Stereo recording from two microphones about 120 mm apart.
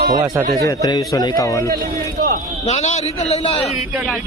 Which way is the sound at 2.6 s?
75° left (ahead or behind).